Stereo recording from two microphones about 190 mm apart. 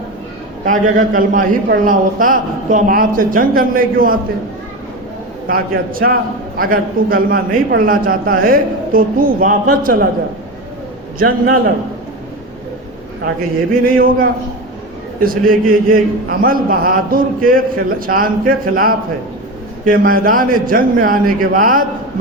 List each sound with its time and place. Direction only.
0.6 s a man's voice: 45° right (ahead or behind)
5.5 s a man's voice: 50° right (ahead or behind)
11.2 s a man's voice: 50° right (ahead or behind)
13.8 s a man's voice: 50° right (ahead or behind)